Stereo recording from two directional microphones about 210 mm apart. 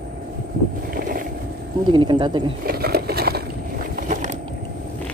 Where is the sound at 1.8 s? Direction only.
20° right (ahead or behind).